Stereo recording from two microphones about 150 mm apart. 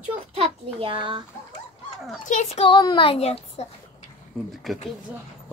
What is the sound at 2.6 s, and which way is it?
A child's voice, 30° left (ahead or behind).